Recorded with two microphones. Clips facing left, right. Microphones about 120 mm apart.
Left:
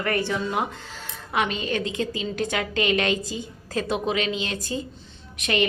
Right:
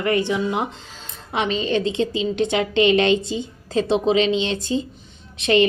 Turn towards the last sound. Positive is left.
turn(degrees=-30)  # may be behind; listen again after turning